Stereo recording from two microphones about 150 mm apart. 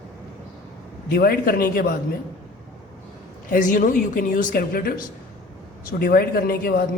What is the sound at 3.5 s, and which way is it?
A man's voice, 60° left (ahead or behind).